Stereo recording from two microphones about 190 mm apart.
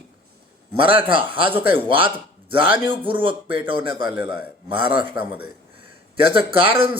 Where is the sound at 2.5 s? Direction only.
25° right (ahead or behind).